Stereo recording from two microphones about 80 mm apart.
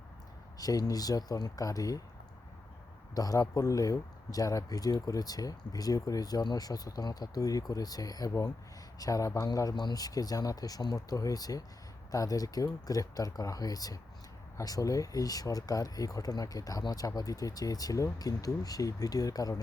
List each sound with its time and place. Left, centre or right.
0.6 s speech: left
3.2 s speech: left